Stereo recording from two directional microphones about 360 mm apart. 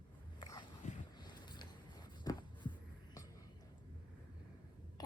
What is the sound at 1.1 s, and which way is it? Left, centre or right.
Boat, centre.